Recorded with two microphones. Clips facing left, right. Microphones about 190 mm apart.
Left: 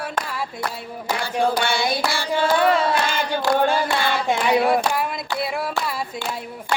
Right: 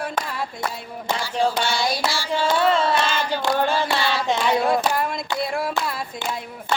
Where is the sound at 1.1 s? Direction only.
60° left (ahead or behind).